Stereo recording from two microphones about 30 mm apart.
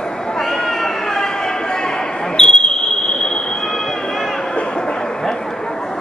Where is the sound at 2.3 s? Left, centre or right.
Left.